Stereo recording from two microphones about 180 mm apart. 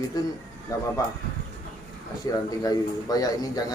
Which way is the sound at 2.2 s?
20° left (ahead or behind).